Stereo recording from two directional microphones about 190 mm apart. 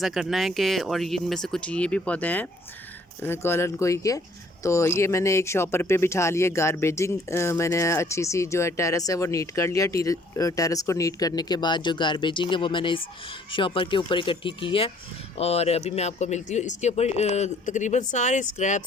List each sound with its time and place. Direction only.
0.0 s speech: centre (ahead or behind); by 18.8 s 40° left (ahead or behind)